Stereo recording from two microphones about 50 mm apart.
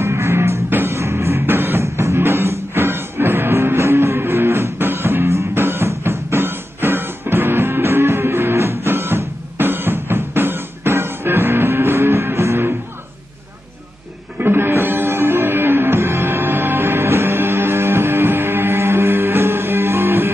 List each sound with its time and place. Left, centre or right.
0.0 s music: right
0.7 s music: right
0.9 s music: right
1.4 s music: right
1.8 s music: right
5.2 s music: right
5.5 s music: right
14.4 s music: right